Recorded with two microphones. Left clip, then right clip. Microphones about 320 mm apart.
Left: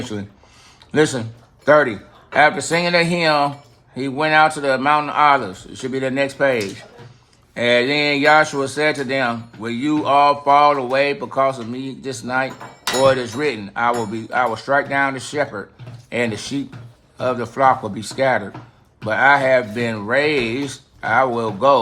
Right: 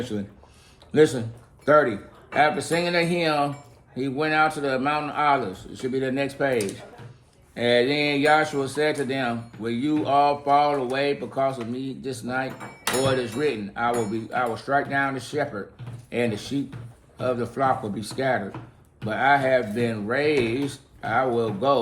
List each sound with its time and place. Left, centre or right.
0.9 s speech: left